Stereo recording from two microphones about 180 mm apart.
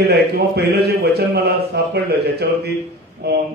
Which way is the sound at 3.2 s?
65° right (ahead or behind).